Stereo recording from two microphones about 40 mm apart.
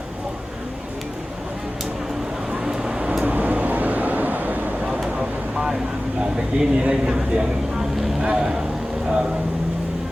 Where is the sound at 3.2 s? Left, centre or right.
Right.